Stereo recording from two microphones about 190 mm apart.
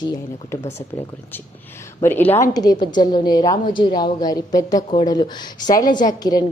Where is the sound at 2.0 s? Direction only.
10° left (ahead or behind).